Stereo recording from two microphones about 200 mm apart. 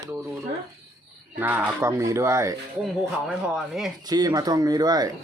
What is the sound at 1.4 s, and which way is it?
Speech, 10° right (ahead or behind).